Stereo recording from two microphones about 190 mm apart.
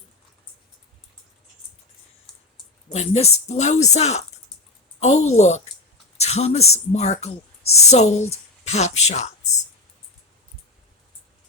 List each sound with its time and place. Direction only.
2.9 s speech: 35° left (ahead or behind)